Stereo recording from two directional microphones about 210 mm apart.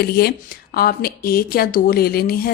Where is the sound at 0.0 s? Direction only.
50° left (ahead or behind).